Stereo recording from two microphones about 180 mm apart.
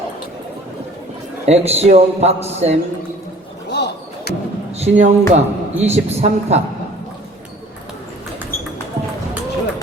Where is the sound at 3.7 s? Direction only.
70° left (ahead or behind).